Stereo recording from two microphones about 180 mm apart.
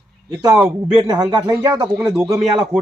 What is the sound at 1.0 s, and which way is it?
Speech, 20° right (ahead or behind).